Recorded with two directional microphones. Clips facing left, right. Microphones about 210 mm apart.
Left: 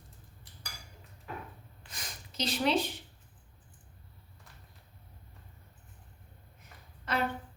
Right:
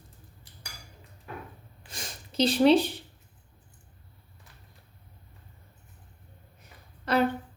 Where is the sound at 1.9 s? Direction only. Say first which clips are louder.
Right 5 dB; 30° right (ahead or behind).